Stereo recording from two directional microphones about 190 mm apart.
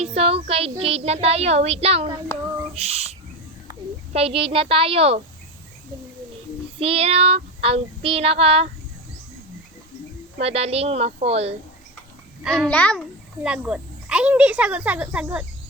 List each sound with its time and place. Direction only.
0.0 s a child's voice: 30° right (ahead or behind)
2.7 s owl: 35° right (ahead or behind)
4.1 s a woman's voice: 30° right (ahead or behind)
6.7 s child singing: 30° right (ahead or behind)
10.4 s child singing: 30° right (ahead or behind)
12.4 s a child's voice: 5° right (ahead or behind)
12.6 s a child's voice: 5° left (ahead or behind)
13.4 s speech: 5° right (ahead or behind)